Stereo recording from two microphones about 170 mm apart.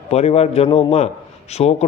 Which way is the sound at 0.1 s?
35° left (ahead or behind).